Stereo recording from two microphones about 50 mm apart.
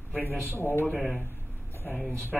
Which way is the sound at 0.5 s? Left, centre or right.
Left.